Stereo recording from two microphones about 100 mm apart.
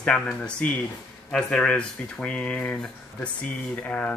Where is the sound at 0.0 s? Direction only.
10° left (ahead or behind).